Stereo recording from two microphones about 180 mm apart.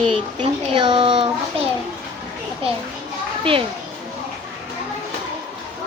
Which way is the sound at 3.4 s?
30° right (ahead or behind).